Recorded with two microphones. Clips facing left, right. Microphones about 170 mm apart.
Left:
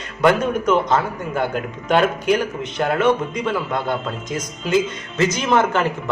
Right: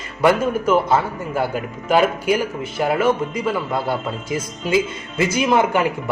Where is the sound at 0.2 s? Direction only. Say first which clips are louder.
Even; 5° right (ahead or behind).